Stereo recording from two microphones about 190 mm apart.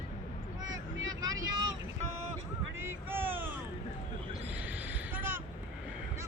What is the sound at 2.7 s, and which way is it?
Vehicle, 10° right (ahead or behind).